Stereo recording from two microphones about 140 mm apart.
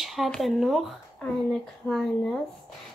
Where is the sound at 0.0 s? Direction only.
Centre (ahead or behind).